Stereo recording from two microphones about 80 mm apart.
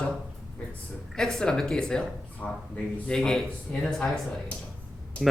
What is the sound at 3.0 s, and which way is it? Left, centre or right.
A man's voice, centre.